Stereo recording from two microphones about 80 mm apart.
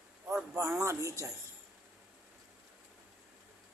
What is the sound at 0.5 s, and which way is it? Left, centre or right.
Speech, right.